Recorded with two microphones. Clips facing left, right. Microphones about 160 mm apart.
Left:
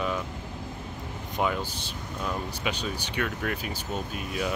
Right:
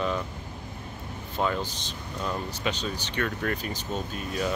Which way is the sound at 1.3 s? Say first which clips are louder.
Even; 10° left (ahead or behind).